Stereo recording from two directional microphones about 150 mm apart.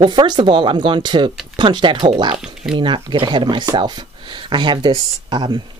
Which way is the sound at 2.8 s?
35° right (ahead or behind).